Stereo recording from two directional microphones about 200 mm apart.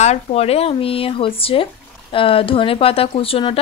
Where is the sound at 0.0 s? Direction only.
35° left (ahead or behind).